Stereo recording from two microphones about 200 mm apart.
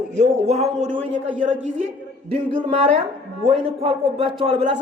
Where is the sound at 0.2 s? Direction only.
35° right (ahead or behind).